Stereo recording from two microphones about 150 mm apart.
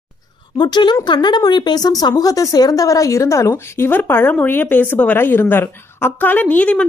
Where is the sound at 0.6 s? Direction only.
30° left (ahead or behind).